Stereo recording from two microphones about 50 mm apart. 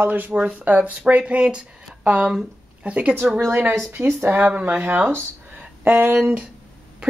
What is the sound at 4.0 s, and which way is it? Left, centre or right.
Speech, right.